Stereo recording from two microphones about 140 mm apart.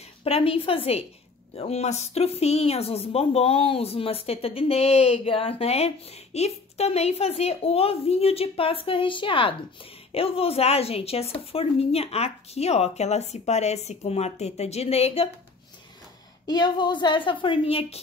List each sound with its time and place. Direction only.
0.2 s a woman's voice: 45° left (ahead or behind)
16.4 s a woman's voice: 30° left (ahead or behind)